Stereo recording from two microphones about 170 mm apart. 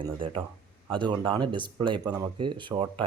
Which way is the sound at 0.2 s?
30° right (ahead or behind).